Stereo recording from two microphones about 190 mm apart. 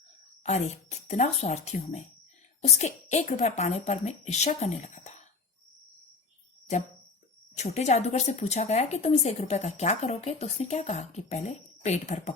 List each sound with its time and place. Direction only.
0.4 s speech: 35° left (ahead or behind)
7.5 s speech: 35° left (ahead or behind)